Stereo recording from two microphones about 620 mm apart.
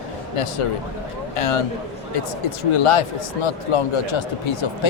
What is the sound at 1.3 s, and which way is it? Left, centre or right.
A man's voice, left.